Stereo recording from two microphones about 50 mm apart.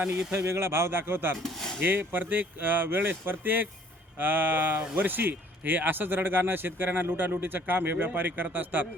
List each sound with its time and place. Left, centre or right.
0.3 s speech: right
1.4 s a sound: centre
1.8 s speech: right